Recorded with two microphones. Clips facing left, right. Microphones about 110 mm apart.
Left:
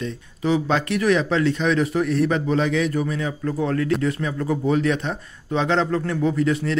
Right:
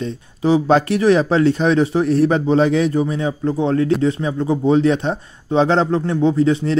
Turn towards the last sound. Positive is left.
turn(degrees=-30)  # may be behind; listen again after turning